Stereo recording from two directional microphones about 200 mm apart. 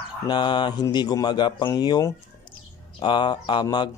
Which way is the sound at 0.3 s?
20° left (ahead or behind).